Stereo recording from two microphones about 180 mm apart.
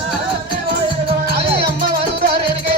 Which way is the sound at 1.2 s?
65° right (ahead or behind).